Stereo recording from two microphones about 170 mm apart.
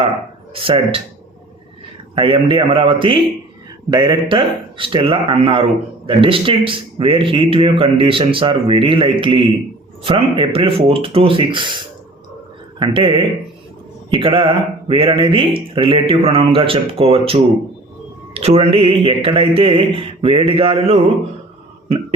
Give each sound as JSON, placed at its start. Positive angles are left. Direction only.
{"t": 0.5, "sound": "speech", "side_deg": -35}
{"t": 2.1, "sound": "a man's voice", "side_deg": -30}